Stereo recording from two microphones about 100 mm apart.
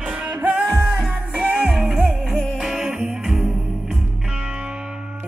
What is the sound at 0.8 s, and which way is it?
Music, centre (ahead or behind).